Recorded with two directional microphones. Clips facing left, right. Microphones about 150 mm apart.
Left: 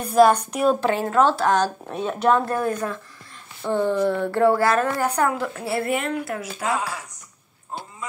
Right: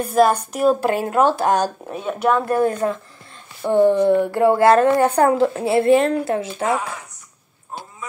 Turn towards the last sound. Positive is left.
turn(degrees=-25)  # may be behind; listen again after turning